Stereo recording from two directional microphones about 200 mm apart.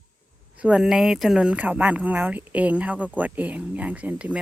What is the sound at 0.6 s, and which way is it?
Speech, 5° right (ahead or behind).